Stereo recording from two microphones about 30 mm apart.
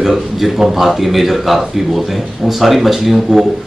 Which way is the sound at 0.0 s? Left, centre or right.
Centre.